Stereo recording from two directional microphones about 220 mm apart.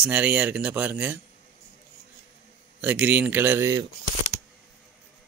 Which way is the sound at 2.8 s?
5° right (ahead or behind).